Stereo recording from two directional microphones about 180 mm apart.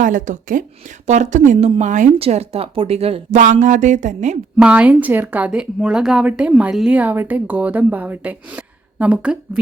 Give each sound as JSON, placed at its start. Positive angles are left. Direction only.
{"t": 0.0, "sound": "speech", "side_deg": -45}
{"t": 1.5, "sound": "speech", "side_deg": -35}
{"t": 4.5, "sound": "speech", "side_deg": -5}